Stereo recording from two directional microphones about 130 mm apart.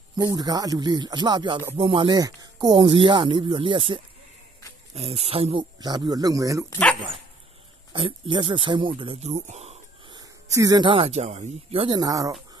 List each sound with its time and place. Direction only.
0.1 s speech: 30° right (ahead or behind)
4.9 s speech: 55° right (ahead or behind); by 6.6 s 25° right (ahead or behind)
7.9 s speech: 40° right (ahead or behind); by 9.8 s 60° right (ahead or behind)
10.5 s speech: 25° right (ahead or behind)
10.9 s speech: 50° right (ahead or behind)
12.0 s speech: 25° right (ahead or behind)